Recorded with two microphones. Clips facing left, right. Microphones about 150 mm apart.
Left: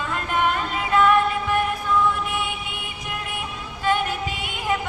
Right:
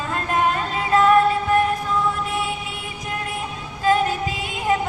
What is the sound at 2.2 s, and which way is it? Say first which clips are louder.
Mantra: right 2 dB; 35° right (ahead or behind).